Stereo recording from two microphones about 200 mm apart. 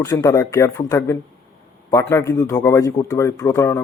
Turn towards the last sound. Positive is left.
turn(degrees=15)  # may be behind; listen again after turning